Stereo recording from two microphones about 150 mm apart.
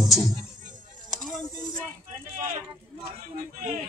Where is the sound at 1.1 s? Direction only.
Centre (ahead or behind).